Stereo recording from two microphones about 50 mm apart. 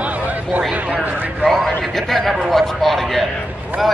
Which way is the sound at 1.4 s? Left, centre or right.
Centre.